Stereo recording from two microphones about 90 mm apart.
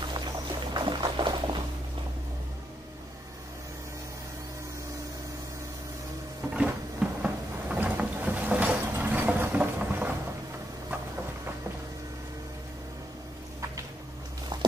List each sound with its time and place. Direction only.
0.0 s music: 60° right (ahead or behind)
6.5 s a sound: 10° right (ahead or behind)
8.9 s vehicle: 20° right (ahead or behind)
14.5 s walk: 55° right (ahead or behind)